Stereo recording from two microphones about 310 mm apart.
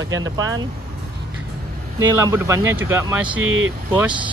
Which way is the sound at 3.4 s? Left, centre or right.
Right.